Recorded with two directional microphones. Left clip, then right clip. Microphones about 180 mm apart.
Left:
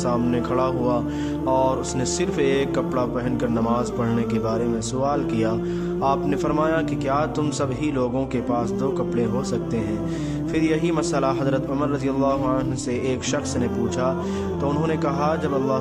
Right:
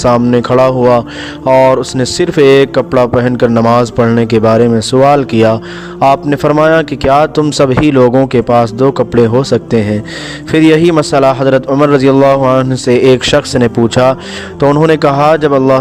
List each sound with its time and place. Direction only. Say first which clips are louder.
0.0 s a man's voice: right 14 dB; 40° right (ahead or behind)